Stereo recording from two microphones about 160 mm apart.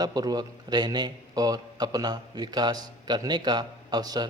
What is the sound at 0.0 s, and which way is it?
A man's voice, 25° right (ahead or behind).